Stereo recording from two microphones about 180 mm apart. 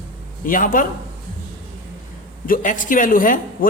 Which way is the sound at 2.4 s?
50° left (ahead or behind).